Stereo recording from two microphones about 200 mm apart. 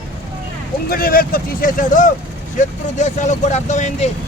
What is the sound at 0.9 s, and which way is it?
Speech, 45° left (ahead or behind).